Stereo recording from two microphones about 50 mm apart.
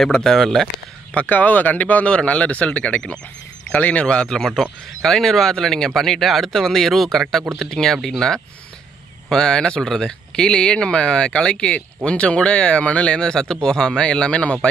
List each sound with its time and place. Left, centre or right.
0.1 s speech: centre
1.2 s speech: left; by 4.5 s centre
5.0 s speech: centre; by 14.7 s left